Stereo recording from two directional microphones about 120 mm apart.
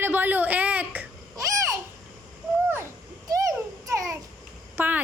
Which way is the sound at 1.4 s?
25° right (ahead or behind).